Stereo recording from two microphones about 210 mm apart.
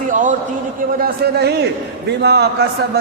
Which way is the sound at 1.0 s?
50° right (ahead or behind).